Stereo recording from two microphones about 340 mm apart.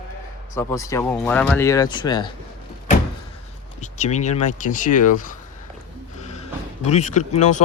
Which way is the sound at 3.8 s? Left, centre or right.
Centre.